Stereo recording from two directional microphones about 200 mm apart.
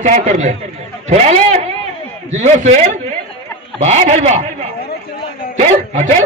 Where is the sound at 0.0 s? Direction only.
35° right (ahead or behind).